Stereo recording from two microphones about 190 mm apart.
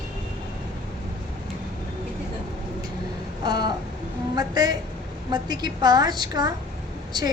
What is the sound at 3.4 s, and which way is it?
A woman's voice, 20° right (ahead or behind).